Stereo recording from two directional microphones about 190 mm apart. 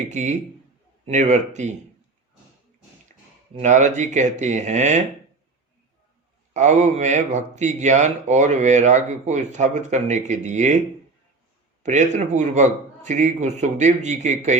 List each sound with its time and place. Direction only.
0.1 s speech: 40° right (ahead or behind)
3.6 s speech: 40° right (ahead or behind)
6.5 s speech: 40° right (ahead or behind)
11.8 s speech: 40° right (ahead or behind)